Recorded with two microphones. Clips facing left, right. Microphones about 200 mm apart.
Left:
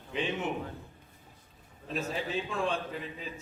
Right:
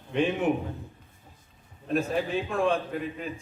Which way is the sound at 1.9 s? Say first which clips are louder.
Right 7 dB; 55° right (ahead or behind).